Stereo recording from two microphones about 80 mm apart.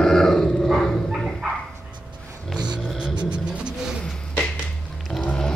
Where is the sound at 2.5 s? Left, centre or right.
Right.